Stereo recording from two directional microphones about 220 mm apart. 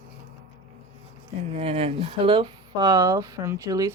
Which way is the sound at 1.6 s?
25° right (ahead or behind).